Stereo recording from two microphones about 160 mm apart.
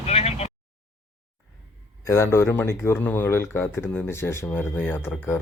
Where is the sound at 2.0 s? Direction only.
15° left (ahead or behind).